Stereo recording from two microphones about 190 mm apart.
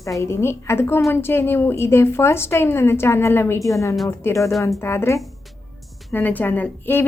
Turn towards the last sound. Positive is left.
turn(degrees=10)  # may be behind; listen again after turning